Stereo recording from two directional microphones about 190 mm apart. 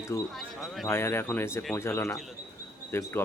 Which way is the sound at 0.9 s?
15° left (ahead or behind).